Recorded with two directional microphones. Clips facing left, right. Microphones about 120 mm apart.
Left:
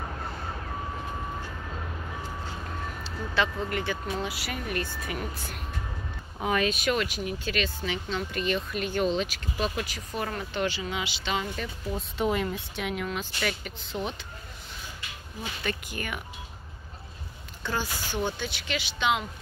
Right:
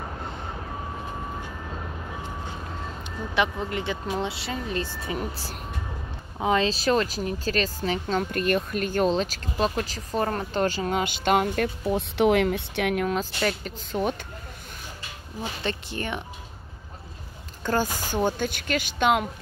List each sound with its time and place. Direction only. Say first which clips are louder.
2.7 s speech: right 1 dB; 20° right (ahead or behind); by 13.1 s 60° right (ahead or behind)
13.1 s speech: right 5 dB; 40° right (ahead or behind)
15.0 s speech: right 6 dB; 30° right (ahead or behind)
17.6 s speech: right 6 dB; 45° right (ahead or behind)